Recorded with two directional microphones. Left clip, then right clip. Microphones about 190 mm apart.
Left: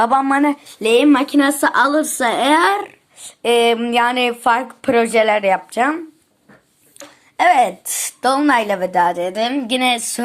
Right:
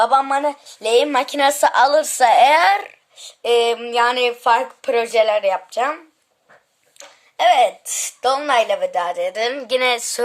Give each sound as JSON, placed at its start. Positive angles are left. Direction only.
{"t": 0.0, "sound": "a woman's voice", "side_deg": 5}
{"t": 1.0, "sound": "a woman's voice", "side_deg": -20}
{"t": 3.4, "sound": "a woman's voice", "side_deg": 0}
{"t": 7.0, "sound": "a woman's voice", "side_deg": 0}